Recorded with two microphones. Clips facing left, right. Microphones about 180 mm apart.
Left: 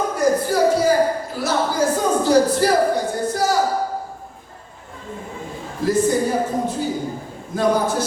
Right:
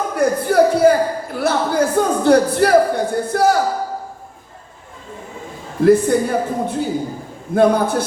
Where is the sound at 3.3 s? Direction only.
60° right (ahead or behind).